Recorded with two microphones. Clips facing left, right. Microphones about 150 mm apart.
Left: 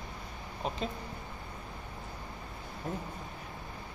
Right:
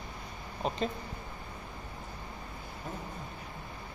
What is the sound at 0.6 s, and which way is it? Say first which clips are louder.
Speech: right 2 dB; centre (ahead or behind).